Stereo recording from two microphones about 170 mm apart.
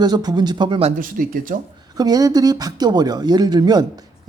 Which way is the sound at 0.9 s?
55° right (ahead or behind).